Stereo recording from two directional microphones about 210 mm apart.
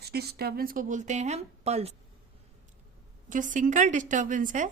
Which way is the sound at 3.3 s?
40° right (ahead or behind).